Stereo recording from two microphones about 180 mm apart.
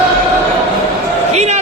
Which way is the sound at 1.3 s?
40° right (ahead or behind).